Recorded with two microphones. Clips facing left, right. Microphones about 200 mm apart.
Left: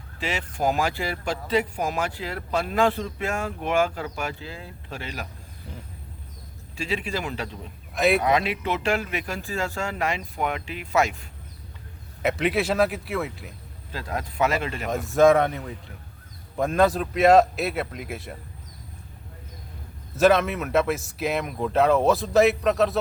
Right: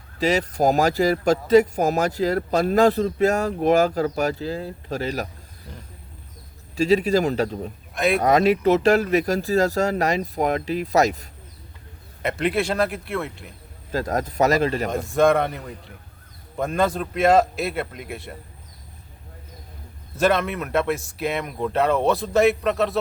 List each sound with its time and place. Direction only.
0.2 s speech: 40° right (ahead or behind)
6.7 s speech: 40° right (ahead or behind)
7.9 s speech: centre (ahead or behind)
8.2 s speech: 40° right (ahead or behind)
12.2 s speech: centre (ahead or behind)
13.9 s speech: 45° right (ahead or behind)
15.0 s speech: centre (ahead or behind)
20.1 s speech: centre (ahead or behind)